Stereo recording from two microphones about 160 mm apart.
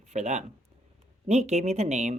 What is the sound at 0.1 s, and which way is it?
Speech, 45° right (ahead or behind).